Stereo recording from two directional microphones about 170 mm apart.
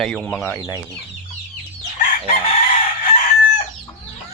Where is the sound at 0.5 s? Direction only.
20° left (ahead or behind).